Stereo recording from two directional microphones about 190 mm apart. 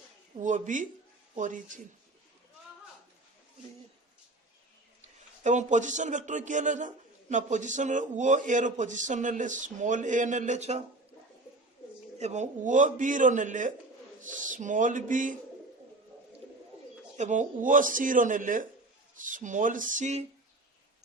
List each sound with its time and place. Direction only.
0.3 s a man's voice: 40° right (ahead or behind)
5.4 s a man's voice: 40° right (ahead or behind)
12.2 s a man's voice: 40° right (ahead or behind)
17.2 s speech: 40° right (ahead or behind)